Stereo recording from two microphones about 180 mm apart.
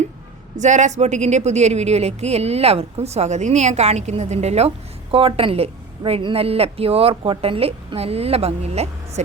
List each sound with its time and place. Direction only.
0.5 s speech: 40° right (ahead or behind)